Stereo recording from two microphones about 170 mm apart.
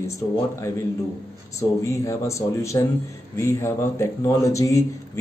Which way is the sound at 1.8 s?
15° left (ahead or behind).